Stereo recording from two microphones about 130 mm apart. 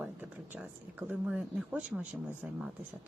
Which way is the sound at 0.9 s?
10° right (ahead or behind).